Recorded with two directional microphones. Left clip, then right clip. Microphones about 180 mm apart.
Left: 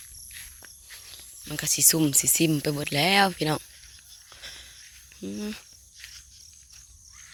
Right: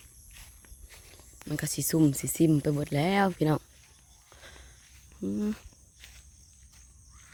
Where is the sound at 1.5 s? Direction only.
25° right (ahead or behind).